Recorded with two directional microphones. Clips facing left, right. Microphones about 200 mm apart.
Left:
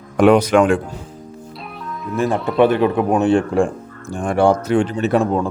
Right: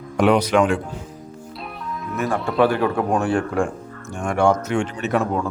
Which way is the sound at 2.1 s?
25° left (ahead or behind).